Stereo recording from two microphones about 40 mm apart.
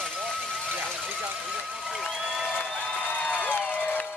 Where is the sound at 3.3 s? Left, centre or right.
Left.